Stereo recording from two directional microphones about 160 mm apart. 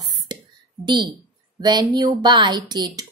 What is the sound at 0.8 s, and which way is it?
Speech, 30° right (ahead or behind).